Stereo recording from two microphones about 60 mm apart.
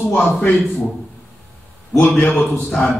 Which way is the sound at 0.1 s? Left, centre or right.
Left.